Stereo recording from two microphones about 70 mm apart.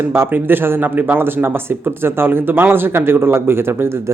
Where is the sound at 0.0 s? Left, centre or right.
Right.